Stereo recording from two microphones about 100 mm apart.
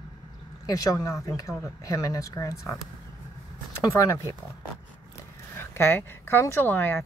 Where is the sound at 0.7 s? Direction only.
35° left (ahead or behind).